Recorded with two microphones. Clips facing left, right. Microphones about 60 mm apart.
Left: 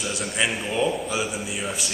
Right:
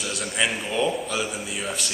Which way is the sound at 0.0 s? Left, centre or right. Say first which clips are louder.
Even; centre.